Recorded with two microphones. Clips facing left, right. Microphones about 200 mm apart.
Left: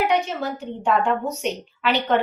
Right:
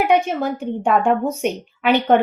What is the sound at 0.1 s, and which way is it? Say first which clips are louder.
A woman's voice: right 5 dB; 50° right (ahead or behind).